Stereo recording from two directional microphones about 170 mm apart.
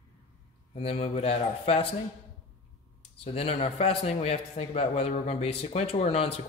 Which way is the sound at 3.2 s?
35° left (ahead or behind).